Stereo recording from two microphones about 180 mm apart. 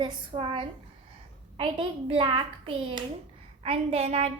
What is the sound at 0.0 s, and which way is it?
A child's voice, 25° right (ahead or behind).